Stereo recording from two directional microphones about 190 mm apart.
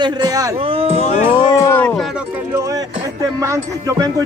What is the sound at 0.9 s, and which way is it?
Speech, 35° left (ahead or behind).